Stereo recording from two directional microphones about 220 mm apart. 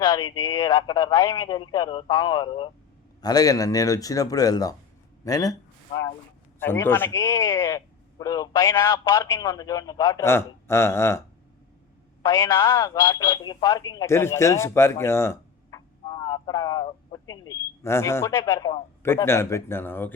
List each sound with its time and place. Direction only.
0.0 s a man's voice: 15° left (ahead or behind)
12.2 s speech: 15° left (ahead or behind)